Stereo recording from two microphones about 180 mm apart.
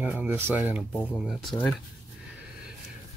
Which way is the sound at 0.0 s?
10° right (ahead or behind).